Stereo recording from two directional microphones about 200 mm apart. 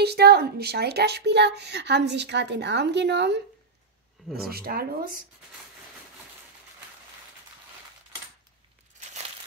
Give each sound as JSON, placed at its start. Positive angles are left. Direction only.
{"t": 0.0, "sound": "speech", "side_deg": -55}
{"t": 4.5, "sound": "speech", "side_deg": -50}